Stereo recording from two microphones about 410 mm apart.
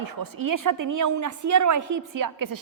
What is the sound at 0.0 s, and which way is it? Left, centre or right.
A woman's voice, right.